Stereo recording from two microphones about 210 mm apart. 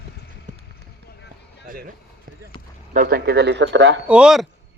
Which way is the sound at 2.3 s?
40° right (ahead or behind).